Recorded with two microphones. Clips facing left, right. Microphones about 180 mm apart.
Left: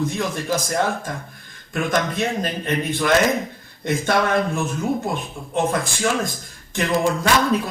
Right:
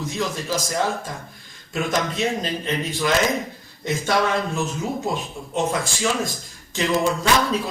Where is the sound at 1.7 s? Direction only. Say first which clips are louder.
Left 2 dB; 55° left (ahead or behind).